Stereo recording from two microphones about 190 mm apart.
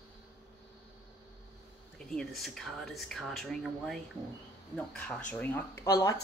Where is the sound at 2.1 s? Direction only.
Centre (ahead or behind).